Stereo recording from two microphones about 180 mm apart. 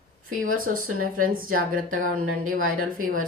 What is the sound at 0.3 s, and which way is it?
Speech, 50° right (ahead or behind).